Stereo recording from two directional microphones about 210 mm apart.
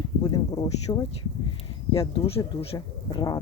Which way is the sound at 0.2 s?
15° left (ahead or behind).